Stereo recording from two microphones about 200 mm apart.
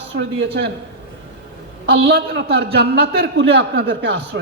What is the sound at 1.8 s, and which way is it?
A man's voice, 55° right (ahead or behind).